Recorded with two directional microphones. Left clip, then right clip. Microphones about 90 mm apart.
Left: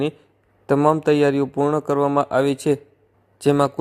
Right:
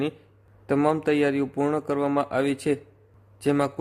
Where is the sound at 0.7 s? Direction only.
45° left (ahead or behind).